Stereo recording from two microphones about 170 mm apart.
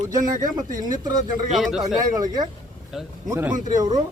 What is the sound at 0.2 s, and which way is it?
Speech, 50° right (ahead or behind).